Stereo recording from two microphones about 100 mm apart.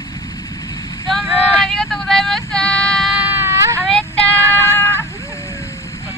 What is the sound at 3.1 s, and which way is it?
Baby cry, 15° right (ahead or behind).